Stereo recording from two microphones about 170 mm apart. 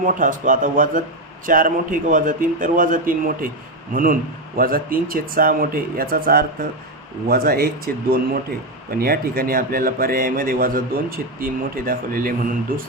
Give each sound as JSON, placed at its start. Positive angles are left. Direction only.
{"t": 0.0, "sound": "a man's voice", "side_deg": -50}
{"t": 9.0, "sound": "a man's voice", "side_deg": -60}